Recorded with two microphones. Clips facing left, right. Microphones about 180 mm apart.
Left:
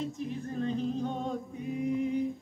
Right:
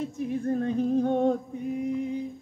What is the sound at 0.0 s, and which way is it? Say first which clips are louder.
Humming: right 6 dB; 55° right (ahead or behind).